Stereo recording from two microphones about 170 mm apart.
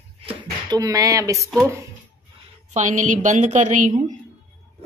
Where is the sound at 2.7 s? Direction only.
45° right (ahead or behind).